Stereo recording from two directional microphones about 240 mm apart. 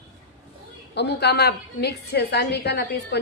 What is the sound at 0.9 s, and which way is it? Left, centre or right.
A woman's voice, left.